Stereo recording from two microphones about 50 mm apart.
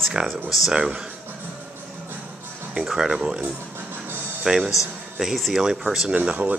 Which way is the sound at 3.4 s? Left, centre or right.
Right.